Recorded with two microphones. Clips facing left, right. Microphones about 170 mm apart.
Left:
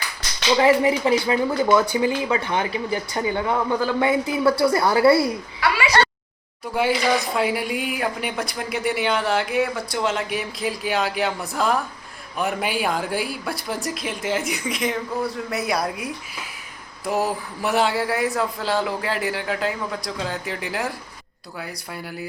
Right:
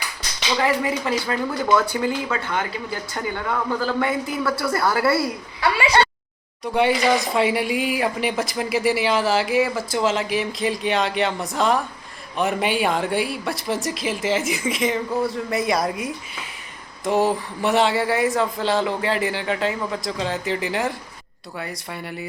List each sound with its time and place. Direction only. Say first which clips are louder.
0.6 s a man's voice: left 5 dB; 20° left (ahead or behind)
6.7 s speech: right 2 dB; centre (ahead or behind)